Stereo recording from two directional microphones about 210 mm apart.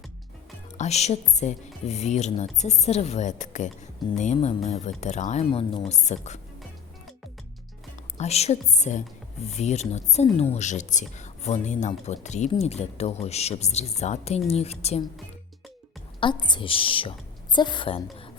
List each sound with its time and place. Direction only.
0.8 s speech: 30° left (ahead or behind)
8.2 s speech: 30° left (ahead or behind)
16.2 s a woman's voice: 20° left (ahead or behind)